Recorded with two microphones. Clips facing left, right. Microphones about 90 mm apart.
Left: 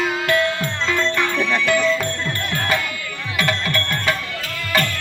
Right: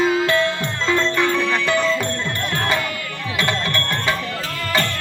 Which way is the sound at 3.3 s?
25° right (ahead or behind).